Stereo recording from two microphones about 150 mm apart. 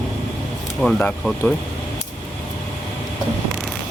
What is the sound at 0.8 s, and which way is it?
Speech, 5° left (ahead or behind).